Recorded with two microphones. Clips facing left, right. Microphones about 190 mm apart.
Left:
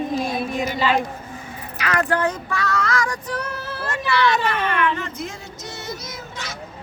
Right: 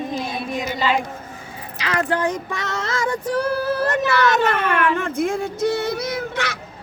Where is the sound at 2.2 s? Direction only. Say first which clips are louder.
Even; 15° right (ahead or behind); by 6.5 s 65° right (ahead or behind).